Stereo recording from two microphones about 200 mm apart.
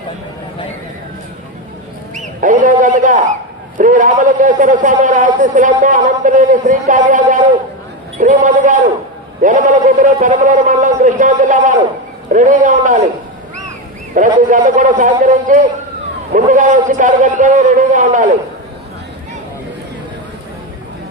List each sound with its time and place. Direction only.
2.1 s a man's voice: 40° right (ahead or behind)
14.1 s a man's voice: 40° right (ahead or behind)